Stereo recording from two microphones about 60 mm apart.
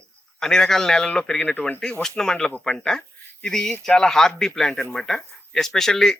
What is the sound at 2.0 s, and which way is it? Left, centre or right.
Speech, centre.